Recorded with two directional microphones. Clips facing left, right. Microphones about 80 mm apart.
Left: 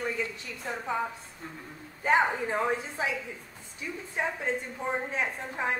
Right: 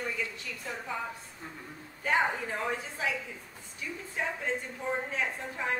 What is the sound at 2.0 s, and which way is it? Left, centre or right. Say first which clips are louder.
Speech: left 4 dB; left.